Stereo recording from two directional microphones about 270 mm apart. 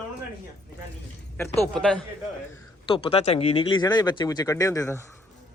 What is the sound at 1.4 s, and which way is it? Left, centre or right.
Speech, centre.